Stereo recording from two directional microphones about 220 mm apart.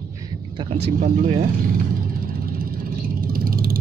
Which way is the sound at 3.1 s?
40° right (ahead or behind).